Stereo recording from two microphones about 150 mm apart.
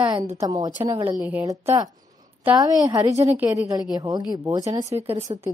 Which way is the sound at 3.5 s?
20° right (ahead or behind).